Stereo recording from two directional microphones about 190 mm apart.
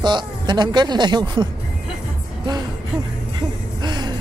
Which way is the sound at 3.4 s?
25° right (ahead or behind).